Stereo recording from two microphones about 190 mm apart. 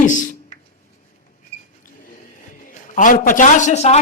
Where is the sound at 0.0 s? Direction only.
40° left (ahead or behind).